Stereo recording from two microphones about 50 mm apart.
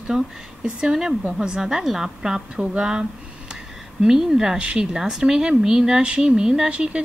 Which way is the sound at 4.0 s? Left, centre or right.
Centre.